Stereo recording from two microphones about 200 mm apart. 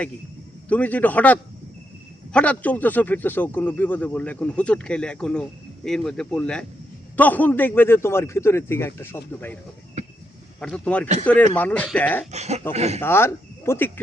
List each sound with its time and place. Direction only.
0.7 s speech: 5° left (ahead or behind)
10.6 s speech: 5° left (ahead or behind)
12.3 s speech: 35° right (ahead or behind)
13.0 s speech: 10° left (ahead or behind)